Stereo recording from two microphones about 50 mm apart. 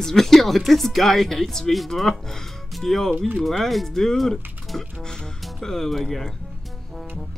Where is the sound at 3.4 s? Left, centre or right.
Centre.